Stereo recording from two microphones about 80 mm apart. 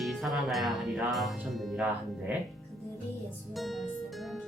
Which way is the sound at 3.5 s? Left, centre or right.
Centre.